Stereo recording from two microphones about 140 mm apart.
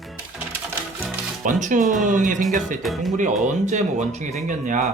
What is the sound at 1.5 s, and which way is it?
Speech, 65° right (ahead or behind).